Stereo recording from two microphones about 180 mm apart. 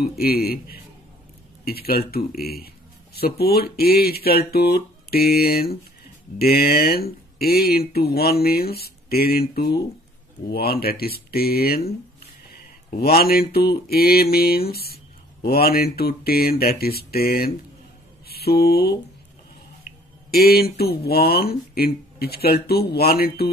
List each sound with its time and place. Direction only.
0.2 s speech: 55° left (ahead or behind)
12.4 s mantra: 55° left (ahead or behind)
15.4 s speech: 60° left (ahead or behind)
18.3 s mantra: 60° left (ahead or behind)
20.2 s speech: 60° left (ahead or behind)